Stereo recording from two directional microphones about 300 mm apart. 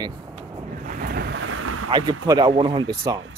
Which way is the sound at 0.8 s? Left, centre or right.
Right.